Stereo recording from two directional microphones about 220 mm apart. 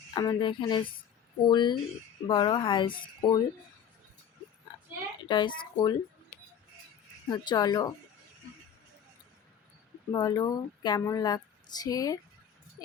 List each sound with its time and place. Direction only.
0.1 s speech: 20° left (ahead or behind)
5.5 s speech: 20° left (ahead or behind)
7.3 s speech: 20° left (ahead or behind)
10.1 s a woman's voice: 20° left (ahead or behind)